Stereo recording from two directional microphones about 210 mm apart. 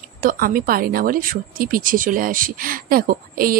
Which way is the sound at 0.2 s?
45° right (ahead or behind).